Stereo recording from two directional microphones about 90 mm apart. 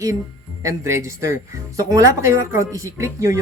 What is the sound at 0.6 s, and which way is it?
Speech, 35° right (ahead or behind).